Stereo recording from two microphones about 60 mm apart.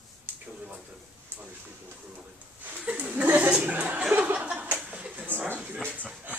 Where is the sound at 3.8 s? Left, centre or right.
Centre.